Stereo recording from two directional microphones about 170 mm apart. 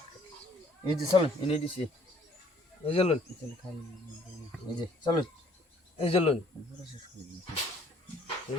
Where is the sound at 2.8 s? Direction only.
35° left (ahead or behind).